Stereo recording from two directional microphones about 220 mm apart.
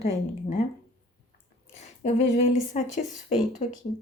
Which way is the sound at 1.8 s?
30° left (ahead or behind).